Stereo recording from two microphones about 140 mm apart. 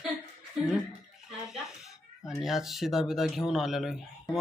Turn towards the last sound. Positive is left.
turn(degrees=0)  # may be behind; listen again after turning